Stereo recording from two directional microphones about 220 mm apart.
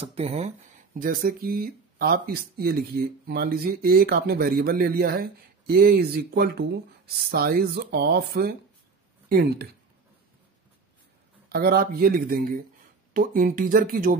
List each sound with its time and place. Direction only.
0.0 s speech: 30° right (ahead or behind)
0.9 s speech: 40° right (ahead or behind)
11.4 s speech: 45° right (ahead or behind)